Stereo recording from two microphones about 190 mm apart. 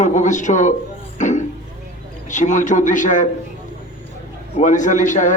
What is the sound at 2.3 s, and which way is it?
A man's voice, 40° left (ahead or behind).